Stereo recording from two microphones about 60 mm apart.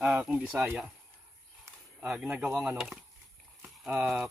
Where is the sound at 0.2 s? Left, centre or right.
Centre.